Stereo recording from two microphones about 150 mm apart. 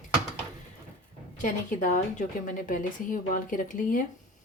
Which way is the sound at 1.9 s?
60° left (ahead or behind).